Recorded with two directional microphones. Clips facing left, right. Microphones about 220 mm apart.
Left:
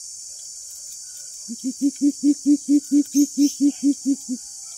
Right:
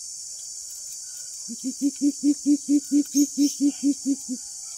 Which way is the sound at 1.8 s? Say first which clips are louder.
Left 3 dB; 5° left (ahead or behind).